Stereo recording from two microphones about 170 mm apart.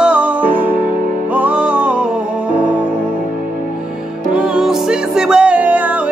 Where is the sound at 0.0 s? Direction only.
5° right (ahead or behind).